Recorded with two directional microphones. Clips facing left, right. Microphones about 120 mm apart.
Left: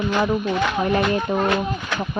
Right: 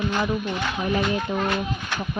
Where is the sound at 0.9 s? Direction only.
60° left (ahead or behind).